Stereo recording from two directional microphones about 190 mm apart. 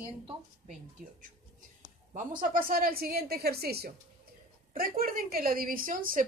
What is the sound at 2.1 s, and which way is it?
Speech, 45° right (ahead or behind).